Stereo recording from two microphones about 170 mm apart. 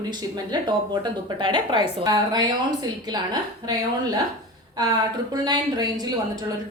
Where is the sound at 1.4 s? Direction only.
25° right (ahead or behind).